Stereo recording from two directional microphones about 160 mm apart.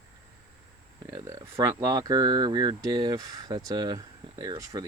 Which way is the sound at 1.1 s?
20° right (ahead or behind).